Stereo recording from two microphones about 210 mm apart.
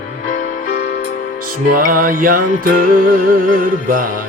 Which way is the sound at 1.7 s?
40° right (ahead or behind).